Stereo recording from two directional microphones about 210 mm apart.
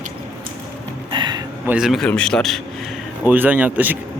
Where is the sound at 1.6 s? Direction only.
5° right (ahead or behind).